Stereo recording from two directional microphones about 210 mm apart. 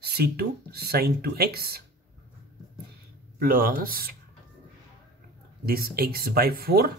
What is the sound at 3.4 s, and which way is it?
Speech, 45° right (ahead or behind).